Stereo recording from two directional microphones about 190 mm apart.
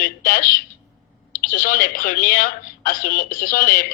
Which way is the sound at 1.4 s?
45° left (ahead or behind).